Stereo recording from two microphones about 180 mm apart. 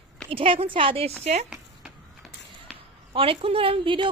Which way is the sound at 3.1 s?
30° right (ahead or behind).